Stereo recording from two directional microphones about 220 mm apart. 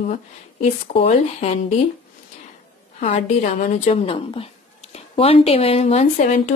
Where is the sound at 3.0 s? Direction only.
30° left (ahead or behind).